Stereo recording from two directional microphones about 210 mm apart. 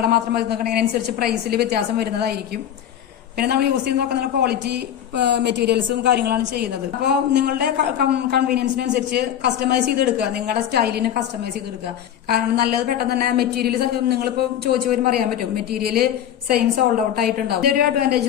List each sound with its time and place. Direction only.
0.1 s a woman's voice: 50° right (ahead or behind)
3.3 s a woman's voice: 50° right (ahead or behind)
12.3 s a woman's voice: 50° right (ahead or behind)